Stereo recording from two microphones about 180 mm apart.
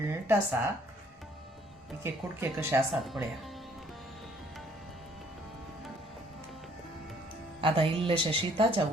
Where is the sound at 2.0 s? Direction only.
15° right (ahead or behind).